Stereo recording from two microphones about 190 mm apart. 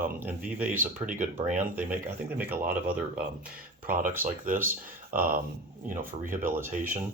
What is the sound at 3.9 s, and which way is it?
Speech, 45° right (ahead or behind).